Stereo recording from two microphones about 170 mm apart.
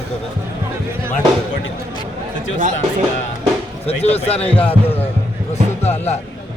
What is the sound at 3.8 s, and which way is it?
Speech, 40° left (ahead or behind).